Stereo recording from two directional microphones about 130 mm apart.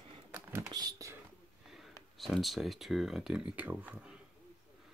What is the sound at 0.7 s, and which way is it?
Computer keyboard, 30° right (ahead or behind).